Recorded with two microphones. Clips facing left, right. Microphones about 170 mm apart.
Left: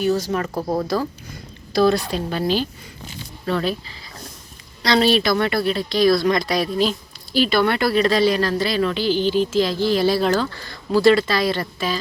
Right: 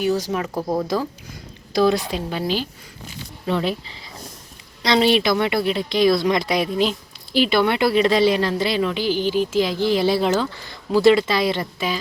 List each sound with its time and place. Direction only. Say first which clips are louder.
0.0 s speech: left 1 dB; 10° right (ahead or behind)
1.7 s speech: left 1 dB; 15° right (ahead or behind)